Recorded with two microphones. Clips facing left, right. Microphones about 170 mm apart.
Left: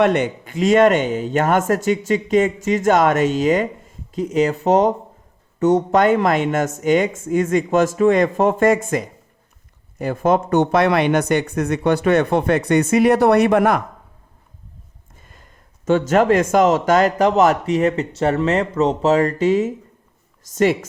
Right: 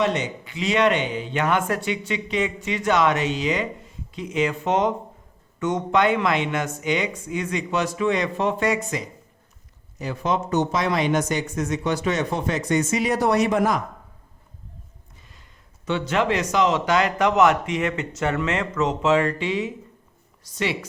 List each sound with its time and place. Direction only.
0.0 s speech: 55° left (ahead or behind)
15.2 s speech: 50° left (ahead or behind)